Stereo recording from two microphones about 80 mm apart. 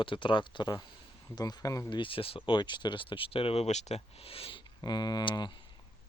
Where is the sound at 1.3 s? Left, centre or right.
Left.